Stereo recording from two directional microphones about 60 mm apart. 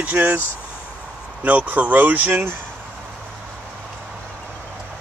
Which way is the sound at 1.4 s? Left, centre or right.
Right.